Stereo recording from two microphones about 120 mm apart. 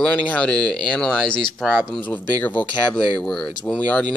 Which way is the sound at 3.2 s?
5° left (ahead or behind).